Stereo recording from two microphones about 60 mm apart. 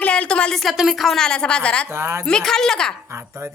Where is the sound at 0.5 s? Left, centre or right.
Centre.